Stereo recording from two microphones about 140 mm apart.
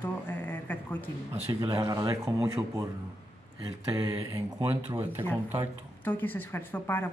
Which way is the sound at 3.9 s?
20° right (ahead or behind).